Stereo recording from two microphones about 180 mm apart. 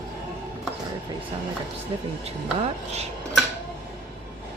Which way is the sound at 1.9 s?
30° right (ahead or behind).